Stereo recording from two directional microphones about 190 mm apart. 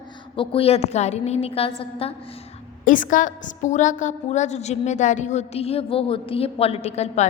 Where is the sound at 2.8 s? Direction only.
45° left (ahead or behind).